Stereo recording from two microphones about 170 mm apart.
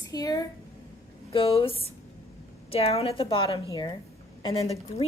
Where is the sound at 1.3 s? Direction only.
35° left (ahead or behind).